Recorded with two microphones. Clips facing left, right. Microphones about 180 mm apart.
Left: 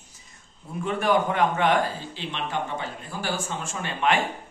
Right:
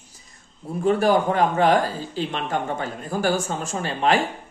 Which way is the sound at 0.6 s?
35° right (ahead or behind).